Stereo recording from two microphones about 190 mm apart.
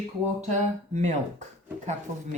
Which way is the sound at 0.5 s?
40° right (ahead or behind).